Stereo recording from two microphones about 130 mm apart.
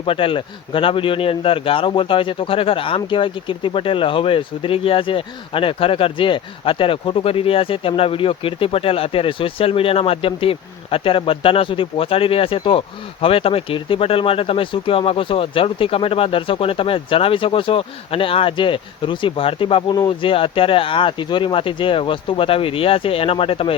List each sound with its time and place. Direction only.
0.0 s speech: 40° left (ahead or behind)